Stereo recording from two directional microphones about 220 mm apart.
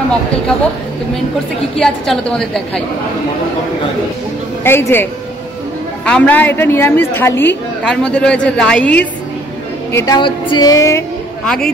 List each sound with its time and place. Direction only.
1.8 s a woman's voice: 5° left (ahead or behind)
4.6 s a woman's voice: 10° left (ahead or behind)
6.0 s a woman's voice: 5° left (ahead or behind)
9.9 s a woman's voice: 20° left (ahead or behind)
11.4 s a woman's voice: 5° left (ahead or behind)